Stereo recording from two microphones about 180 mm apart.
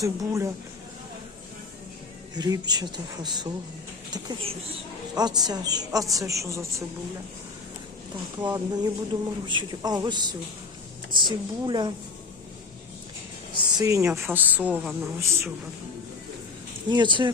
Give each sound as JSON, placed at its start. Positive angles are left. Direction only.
{"t": 0.0, "sound": "a woman's voice", "side_deg": -20}
{"t": 2.3, "sound": "a woman's voice", "side_deg": -20}
{"t": 8.4, "sound": "a woman's voice", "side_deg": -20}
{"t": 13.7, "sound": "a woman's voice", "side_deg": -15}
{"t": 16.9, "sound": "a woman's voice", "side_deg": -25}